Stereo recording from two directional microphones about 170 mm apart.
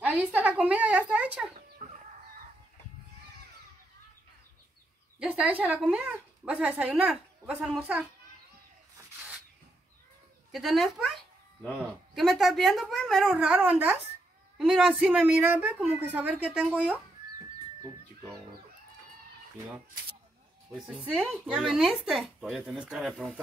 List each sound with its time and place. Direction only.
0.0 s a sound: 10° right (ahead or behind)
1.1 s chicken: 10° right (ahead or behind)
1.8 s chicken: 50° right (ahead or behind)
5.2 s speech: 5° right (ahead or behind)
10.5 s a woman's voice: centre (ahead or behind)
20.7 s speech: centre (ahead or behind)